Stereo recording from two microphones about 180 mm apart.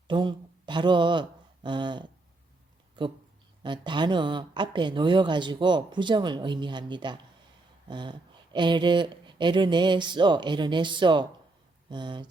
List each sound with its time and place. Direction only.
0.1 s speech: 25° right (ahead or behind)